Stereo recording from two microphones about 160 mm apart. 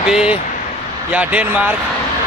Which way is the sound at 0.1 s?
5° right (ahead or behind).